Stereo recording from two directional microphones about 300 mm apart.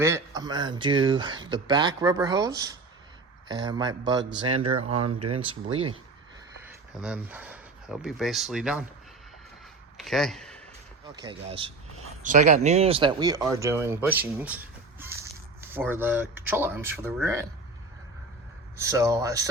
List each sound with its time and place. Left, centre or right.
0.0 s speech: centre
4.9 s speech: right
5.3 s speech: centre
7.0 s speech: centre
10.0 s speech: centre
11.1 s speech: centre
18.8 s speech: centre